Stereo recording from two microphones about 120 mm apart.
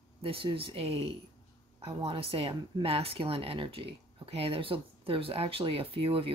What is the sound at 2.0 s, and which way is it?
Speech, 50° right (ahead or behind).